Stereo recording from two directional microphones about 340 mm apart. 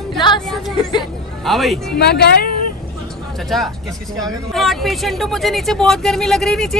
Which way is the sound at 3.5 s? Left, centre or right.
Centre.